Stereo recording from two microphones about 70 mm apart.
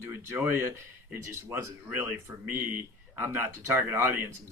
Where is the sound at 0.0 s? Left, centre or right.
Right.